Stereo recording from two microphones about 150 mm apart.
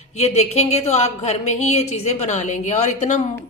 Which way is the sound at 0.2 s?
45° left (ahead or behind).